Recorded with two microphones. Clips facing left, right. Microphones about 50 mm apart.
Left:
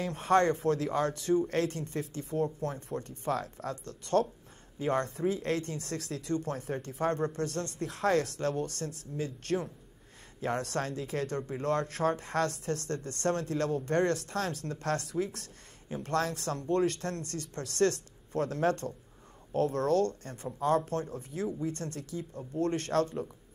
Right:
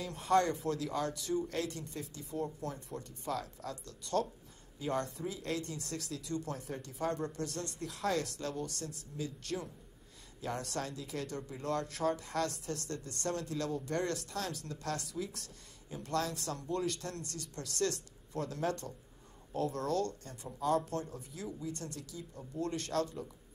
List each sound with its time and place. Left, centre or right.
0.0 s speech: left
5.8 s speech: left
10.7 s speech: left